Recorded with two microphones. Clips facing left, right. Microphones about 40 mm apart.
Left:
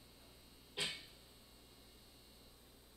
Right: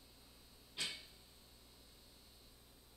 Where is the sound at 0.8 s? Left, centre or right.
Centre.